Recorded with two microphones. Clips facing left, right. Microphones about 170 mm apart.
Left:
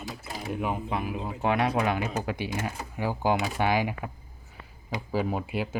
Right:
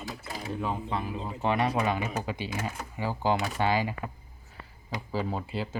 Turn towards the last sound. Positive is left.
turn(degrees=15)  # may be behind; listen again after turning